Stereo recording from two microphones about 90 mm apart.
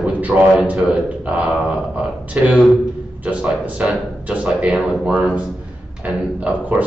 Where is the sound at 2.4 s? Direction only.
15° right (ahead or behind).